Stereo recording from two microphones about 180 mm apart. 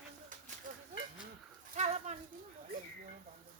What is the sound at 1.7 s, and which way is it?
Dog, 40° right (ahead or behind).